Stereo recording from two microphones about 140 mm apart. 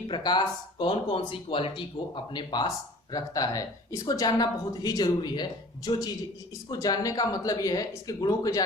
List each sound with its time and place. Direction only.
0.1 s speech: 30° left (ahead or behind)